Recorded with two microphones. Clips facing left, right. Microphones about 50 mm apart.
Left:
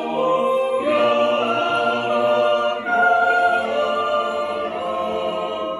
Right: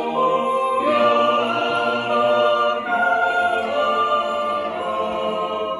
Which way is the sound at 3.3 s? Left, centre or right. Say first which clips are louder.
Left 2 dB; left.